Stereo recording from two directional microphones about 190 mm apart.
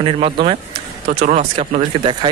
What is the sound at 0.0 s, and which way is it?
Speech, 30° right (ahead or behind).